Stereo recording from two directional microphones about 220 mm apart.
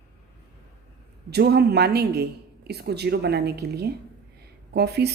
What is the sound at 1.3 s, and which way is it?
A woman's voice, 50° right (ahead or behind).